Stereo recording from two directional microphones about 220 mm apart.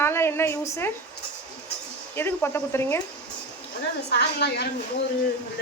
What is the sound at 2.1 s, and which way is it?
Speech, 10° left (ahead or behind).